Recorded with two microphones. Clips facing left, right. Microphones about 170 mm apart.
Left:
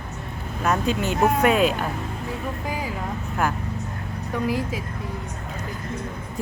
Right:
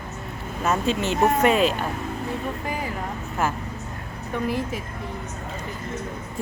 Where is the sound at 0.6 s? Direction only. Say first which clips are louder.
Even; centre (ahead or behind).